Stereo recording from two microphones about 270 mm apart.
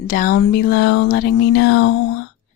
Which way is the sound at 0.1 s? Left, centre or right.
Left.